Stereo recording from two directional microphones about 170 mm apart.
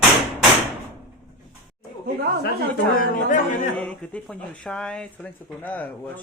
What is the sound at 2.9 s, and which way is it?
Speech, 50° left (ahead or behind).